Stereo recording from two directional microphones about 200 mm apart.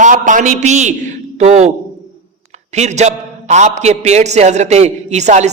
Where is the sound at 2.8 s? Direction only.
35° right (ahead or behind).